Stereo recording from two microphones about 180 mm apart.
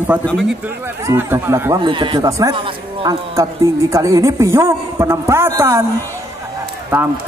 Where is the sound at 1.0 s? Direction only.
10° right (ahead or behind).